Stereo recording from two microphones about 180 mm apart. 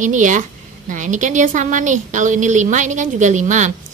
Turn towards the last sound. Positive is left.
turn(degrees=-45)  # may be behind; listen again after turning